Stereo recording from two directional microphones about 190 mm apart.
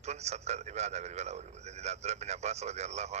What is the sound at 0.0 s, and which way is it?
A man's voice, 35° right (ahead or behind).